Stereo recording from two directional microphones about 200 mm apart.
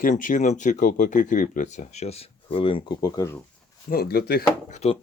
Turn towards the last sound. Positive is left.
turn(degrees=30)  # may be behind; listen again after turning